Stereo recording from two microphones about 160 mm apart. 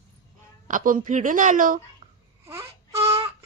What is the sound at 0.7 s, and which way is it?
A woman's voice, 55° right (ahead or behind).